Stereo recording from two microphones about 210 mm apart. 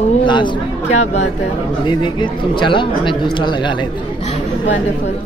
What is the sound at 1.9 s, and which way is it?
A man's voice, 20° left (ahead or behind).